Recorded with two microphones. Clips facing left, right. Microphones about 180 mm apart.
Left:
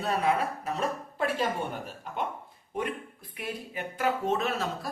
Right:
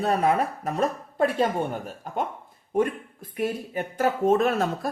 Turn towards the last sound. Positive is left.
turn(degrees=-50)  # may be behind; listen again after turning